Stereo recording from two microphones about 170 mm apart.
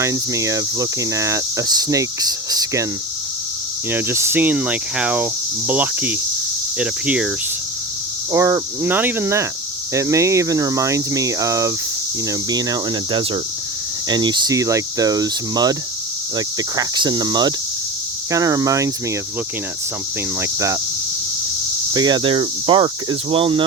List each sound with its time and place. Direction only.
0.0 s cricket: 15° right (ahead or behind)
3.9 s speech: 15° right (ahead or behind)
8.3 s speech: 15° right (ahead or behind)
9.9 s cricket: 20° right (ahead or behind)
20.4 s cricket: 20° right (ahead or behind)
21.9 s cricket: 25° right (ahead or behind)